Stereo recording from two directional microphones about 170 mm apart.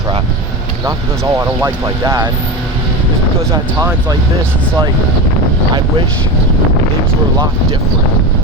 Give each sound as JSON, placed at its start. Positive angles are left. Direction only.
{"t": 0.9, "sound": "speech", "side_deg": -15}
{"t": 3.5, "sound": "speech", "side_deg": -20}